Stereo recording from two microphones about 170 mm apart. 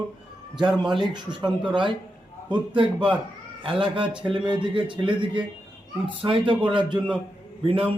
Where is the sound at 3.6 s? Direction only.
30° right (ahead or behind).